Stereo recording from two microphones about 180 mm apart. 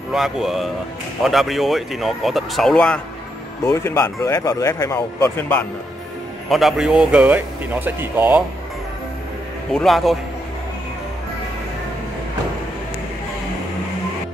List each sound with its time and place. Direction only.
0.1 s speech: centre (ahead or behind)
3.6 s speech: 15° left (ahead or behind)
6.5 s speech: centre (ahead or behind)
9.7 s speech: centre (ahead or behind)